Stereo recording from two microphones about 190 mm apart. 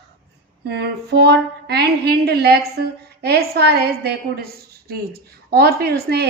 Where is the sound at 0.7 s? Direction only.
60° right (ahead or behind).